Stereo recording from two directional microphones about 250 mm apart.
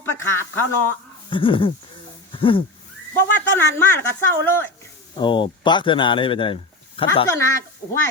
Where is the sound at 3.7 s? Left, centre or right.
Centre.